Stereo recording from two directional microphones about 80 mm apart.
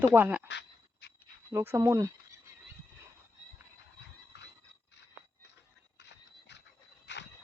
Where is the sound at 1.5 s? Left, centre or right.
Right.